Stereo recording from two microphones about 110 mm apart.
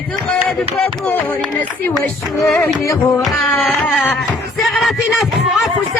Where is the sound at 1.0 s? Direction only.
15° left (ahead or behind).